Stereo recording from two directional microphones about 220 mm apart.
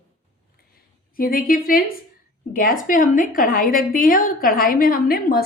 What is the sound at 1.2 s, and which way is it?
A woman's voice, 40° left (ahead or behind).